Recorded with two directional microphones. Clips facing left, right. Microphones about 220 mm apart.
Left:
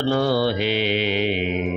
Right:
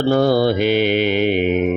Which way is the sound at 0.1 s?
45° right (ahead or behind).